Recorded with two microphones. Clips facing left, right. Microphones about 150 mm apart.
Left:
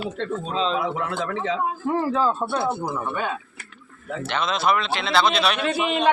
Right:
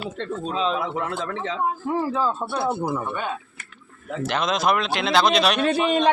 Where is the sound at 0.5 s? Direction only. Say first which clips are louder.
Even; 5° right (ahead or behind).